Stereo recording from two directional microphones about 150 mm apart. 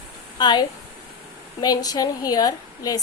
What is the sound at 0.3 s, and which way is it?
Speech, 30° left (ahead or behind).